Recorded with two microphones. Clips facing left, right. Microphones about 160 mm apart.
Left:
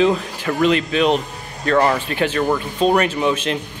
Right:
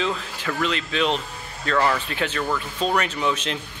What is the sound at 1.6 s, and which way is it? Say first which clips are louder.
Speech: left 5 dB; 40° left (ahead or behind).